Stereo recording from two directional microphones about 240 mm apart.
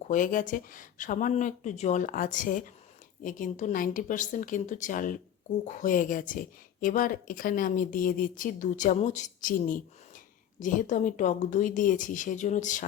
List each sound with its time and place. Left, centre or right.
0.1 s speech: left